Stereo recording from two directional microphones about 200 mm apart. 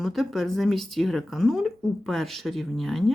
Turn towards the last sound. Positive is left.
turn(degrees=0)  # may be behind; listen again after turning